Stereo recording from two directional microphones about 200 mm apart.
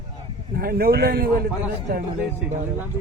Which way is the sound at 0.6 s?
50° right (ahead or behind).